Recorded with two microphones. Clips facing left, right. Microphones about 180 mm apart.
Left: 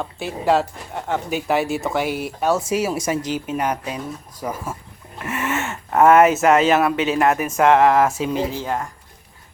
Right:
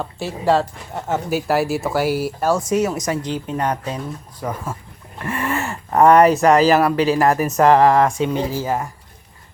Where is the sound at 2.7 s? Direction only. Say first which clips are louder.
Right 2 dB; 10° left (ahead or behind).